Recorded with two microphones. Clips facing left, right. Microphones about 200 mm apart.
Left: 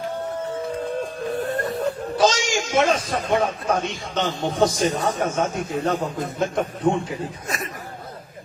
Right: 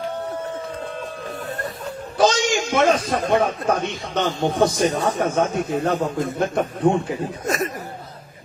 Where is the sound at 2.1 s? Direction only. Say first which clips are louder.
Right 3 dB; 55° right (ahead or behind).